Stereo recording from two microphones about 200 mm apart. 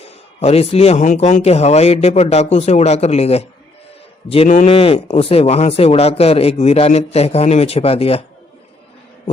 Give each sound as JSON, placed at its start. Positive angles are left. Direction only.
{"t": 0.0, "sound": "speech", "side_deg": 30}